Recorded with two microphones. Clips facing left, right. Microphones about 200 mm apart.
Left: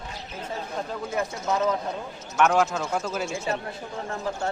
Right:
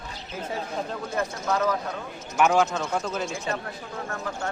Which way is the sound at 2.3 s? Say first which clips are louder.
Even; centre (ahead or behind).